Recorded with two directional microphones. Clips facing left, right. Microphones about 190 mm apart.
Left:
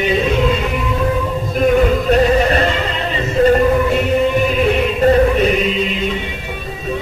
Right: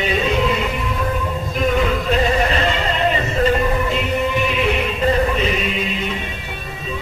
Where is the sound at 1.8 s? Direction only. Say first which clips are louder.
Left 5 dB; 45° left (ahead or behind).